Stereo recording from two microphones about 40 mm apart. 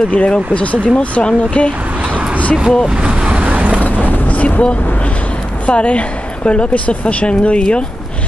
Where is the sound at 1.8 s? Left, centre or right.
Right.